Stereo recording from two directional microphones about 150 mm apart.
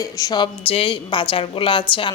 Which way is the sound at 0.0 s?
25° left (ahead or behind).